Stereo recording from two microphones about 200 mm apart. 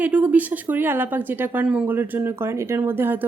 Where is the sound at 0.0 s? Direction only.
5° right (ahead or behind).